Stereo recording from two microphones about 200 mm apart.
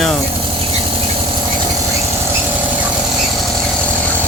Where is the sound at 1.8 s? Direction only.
15° right (ahead or behind).